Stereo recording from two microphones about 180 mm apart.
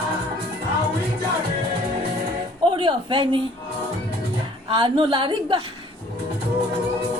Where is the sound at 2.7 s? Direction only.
25° right (ahead or behind).